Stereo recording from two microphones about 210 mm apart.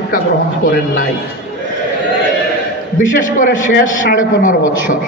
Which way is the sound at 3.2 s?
40° left (ahead or behind).